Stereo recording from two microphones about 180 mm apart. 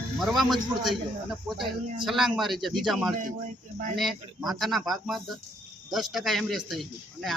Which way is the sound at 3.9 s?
Centre (ahead or behind).